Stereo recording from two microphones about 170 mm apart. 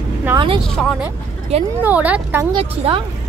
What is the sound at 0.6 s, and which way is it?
Speech, 5° left (ahead or behind).